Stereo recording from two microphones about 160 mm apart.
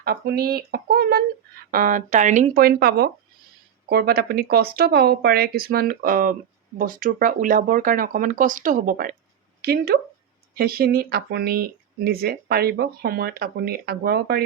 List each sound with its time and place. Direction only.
0.0 s speech: 75° right (ahead or behind)
1.7 s speech: 60° right (ahead or behind)
2.6 s speech: 70° right (ahead or behind)
9.6 s speech: 70° right (ahead or behind)